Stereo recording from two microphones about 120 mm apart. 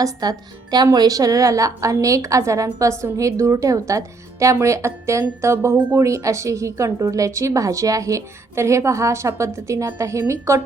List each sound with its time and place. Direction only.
0.0 s speech: 35° right (ahead or behind)